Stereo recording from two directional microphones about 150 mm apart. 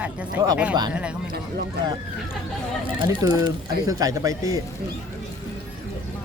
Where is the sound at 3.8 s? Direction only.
25° right (ahead or behind).